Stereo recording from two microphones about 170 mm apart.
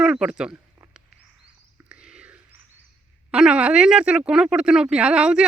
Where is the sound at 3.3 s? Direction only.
5° right (ahead or behind).